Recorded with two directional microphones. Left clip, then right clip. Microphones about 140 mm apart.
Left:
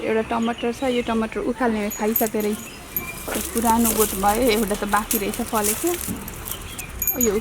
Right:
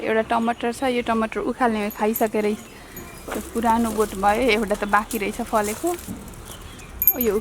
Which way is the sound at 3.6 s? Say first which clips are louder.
Even; 25° right (ahead or behind).